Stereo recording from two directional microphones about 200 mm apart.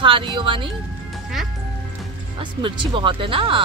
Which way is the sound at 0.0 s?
25° right (ahead or behind).